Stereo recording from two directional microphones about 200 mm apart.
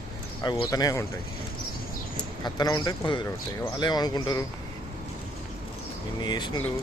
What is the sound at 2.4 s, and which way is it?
Speech, 20° left (ahead or behind).